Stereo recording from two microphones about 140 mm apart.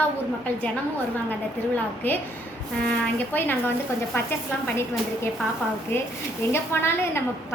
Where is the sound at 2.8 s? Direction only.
10° left (ahead or behind).